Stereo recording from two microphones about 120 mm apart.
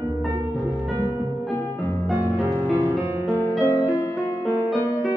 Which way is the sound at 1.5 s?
15° left (ahead or behind).